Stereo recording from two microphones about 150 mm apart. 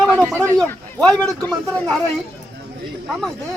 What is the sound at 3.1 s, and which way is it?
Speech, centre (ahead or behind).